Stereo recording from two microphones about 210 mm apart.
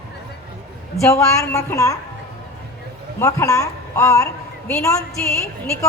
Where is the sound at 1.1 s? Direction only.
15° left (ahead or behind).